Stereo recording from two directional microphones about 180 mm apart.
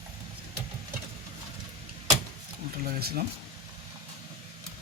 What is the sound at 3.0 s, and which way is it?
Speech, 60° right (ahead or behind).